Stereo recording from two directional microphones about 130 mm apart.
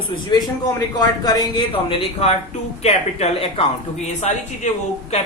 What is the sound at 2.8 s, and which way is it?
Speech, 55° left (ahead or behind).